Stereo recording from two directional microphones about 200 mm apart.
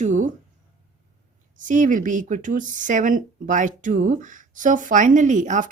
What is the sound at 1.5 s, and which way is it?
Speech, 40° right (ahead or behind).